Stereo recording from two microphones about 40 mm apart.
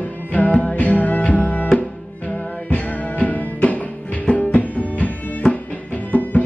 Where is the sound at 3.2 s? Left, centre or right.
Left.